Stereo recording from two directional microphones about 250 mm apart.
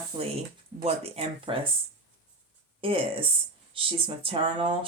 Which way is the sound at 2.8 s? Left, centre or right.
Right.